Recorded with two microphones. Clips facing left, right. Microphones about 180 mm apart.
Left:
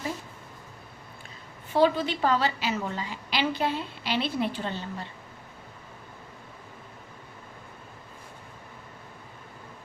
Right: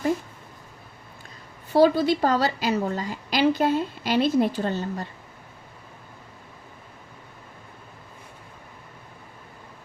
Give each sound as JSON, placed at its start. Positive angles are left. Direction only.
{"t": 1.7, "sound": "a woman's voice", "side_deg": -40}